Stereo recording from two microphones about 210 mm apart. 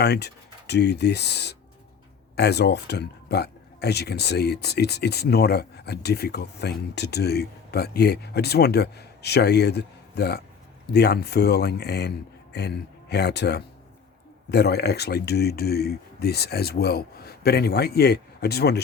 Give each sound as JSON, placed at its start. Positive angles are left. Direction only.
{"t": 0.0, "sound": "speech", "side_deg": 50}